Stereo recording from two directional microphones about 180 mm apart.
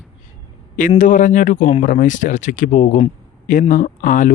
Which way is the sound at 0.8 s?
45° left (ahead or behind).